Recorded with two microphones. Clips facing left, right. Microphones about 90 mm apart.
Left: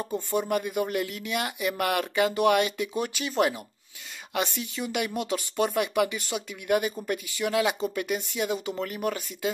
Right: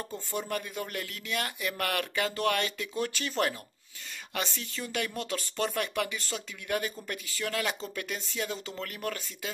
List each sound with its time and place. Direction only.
0.0 s speech: 15° left (ahead or behind)